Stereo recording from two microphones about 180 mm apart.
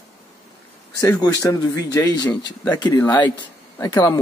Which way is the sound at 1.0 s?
20° left (ahead or behind).